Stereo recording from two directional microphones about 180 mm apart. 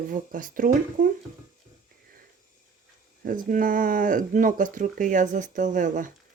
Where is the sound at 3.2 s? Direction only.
50° right (ahead or behind).